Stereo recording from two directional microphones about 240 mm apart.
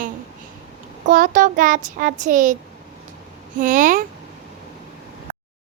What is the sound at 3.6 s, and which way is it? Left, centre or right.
Child singing, right.